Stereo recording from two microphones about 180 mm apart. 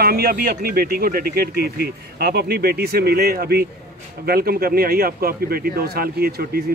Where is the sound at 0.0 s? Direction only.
60° right (ahead or behind).